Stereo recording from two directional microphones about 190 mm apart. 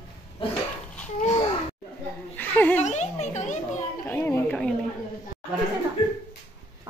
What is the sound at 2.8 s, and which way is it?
Speech, 35° left (ahead or behind).